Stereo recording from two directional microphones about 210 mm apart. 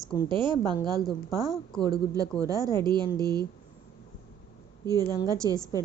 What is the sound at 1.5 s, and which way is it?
Speech, centre (ahead or behind).